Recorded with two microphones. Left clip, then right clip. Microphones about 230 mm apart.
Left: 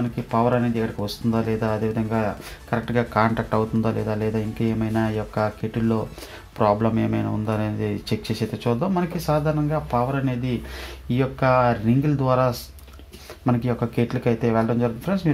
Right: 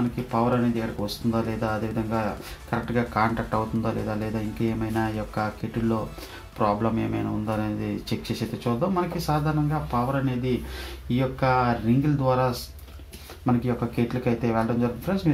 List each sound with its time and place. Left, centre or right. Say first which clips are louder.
0.3 s speech: left 4 dB; left
11.1 s speech: left 3 dB; left